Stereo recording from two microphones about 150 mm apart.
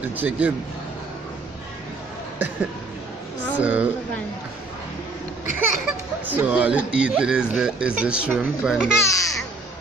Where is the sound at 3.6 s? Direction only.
10° right (ahead or behind).